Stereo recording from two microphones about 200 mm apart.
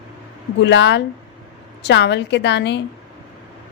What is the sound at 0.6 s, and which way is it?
A woman's voice, 60° left (ahead or behind).